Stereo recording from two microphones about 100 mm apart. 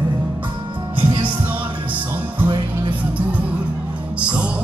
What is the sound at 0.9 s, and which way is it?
Music, 60° right (ahead or behind).